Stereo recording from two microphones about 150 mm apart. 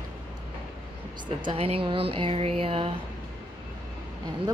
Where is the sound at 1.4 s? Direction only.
40° right (ahead or behind).